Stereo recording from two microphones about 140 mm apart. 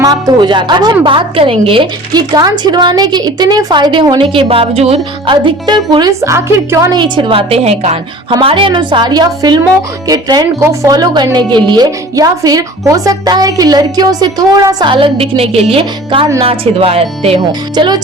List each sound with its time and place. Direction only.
0.0 s a woman's voice: 25° right (ahead or behind)
6.9 s a woman's voice: 35° right (ahead or behind); by 7.9 s 50° right (ahead or behind)
8.3 s a woman's voice: 40° right (ahead or behind)
17.7 s a woman's voice: 30° right (ahead or behind)